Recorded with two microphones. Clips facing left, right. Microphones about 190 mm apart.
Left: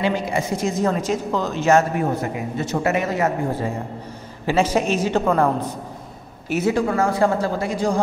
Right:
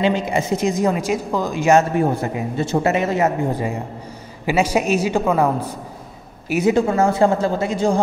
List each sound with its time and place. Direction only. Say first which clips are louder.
0.0 s a woman's voice: right 3 dB; 20° right (ahead or behind)
2.5 s speech: right 3 dB; 30° right (ahead or behind)
4.5 s a woman's voice: right 1 dB; 10° right (ahead or behind)
6.5 s speech: right 3 dB; 20° right (ahead or behind)